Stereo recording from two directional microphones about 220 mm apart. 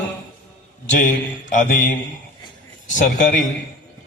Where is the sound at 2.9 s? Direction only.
35° left (ahead or behind).